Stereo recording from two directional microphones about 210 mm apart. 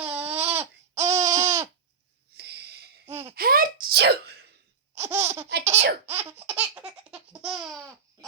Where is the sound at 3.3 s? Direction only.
45° right (ahead or behind).